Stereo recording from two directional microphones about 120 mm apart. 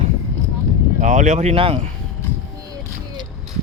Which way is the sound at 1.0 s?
90° right.